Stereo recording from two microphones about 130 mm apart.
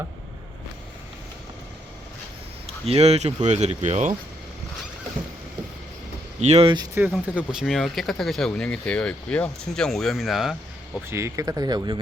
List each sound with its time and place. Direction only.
2.6 s speech: 50° right (ahead or behind)
6.4 s speech: 55° right (ahead or behind)
7.0 s speech: 15° right (ahead or behind)
7.3 s speech: 5° right (ahead or behind)
11.0 s speech: 20° right (ahead or behind)